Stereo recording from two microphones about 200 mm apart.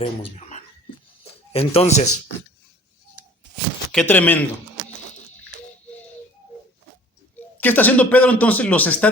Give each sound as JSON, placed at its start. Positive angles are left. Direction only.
{"t": 0.0, "sound": "speech", "side_deg": 30}
{"t": 3.9, "sound": "speech", "side_deg": 10}
{"t": 7.6, "sound": "speech", "side_deg": 10}